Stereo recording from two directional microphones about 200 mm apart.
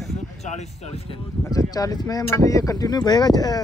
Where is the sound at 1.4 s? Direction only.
20° left (ahead or behind).